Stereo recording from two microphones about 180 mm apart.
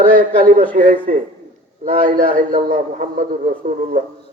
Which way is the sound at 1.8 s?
50° right (ahead or behind).